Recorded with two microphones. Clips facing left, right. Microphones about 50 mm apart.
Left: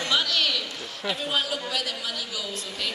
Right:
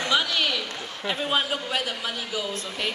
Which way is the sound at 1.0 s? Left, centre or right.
Centre.